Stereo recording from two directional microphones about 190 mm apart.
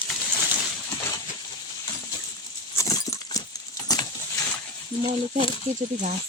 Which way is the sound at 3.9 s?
20° left (ahead or behind).